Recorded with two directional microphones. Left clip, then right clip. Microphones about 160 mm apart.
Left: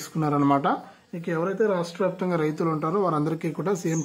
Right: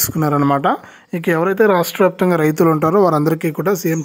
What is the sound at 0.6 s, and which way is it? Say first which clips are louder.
A man's voice: right 8 dB; 65° right (ahead or behind).